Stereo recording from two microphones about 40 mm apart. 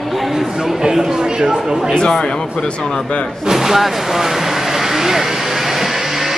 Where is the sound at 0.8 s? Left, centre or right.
Centre.